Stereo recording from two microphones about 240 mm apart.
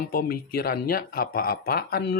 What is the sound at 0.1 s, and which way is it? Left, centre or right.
Speech, left.